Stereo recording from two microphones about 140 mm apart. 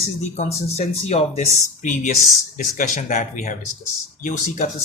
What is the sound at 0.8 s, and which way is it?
Speech, 50° left (ahead or behind).